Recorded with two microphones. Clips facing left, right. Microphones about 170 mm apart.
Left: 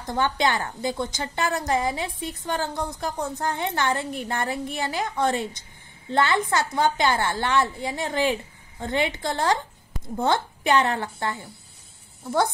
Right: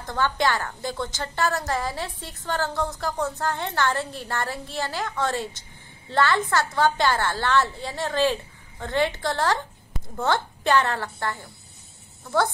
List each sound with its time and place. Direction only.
0.0 s a woman's voice: 20° left (ahead or behind)